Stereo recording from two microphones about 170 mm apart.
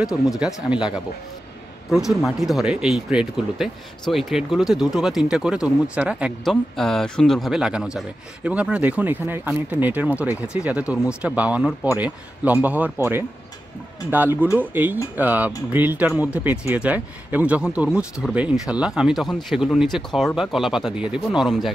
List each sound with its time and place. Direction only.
0.0 s speech: 5° right (ahead or behind)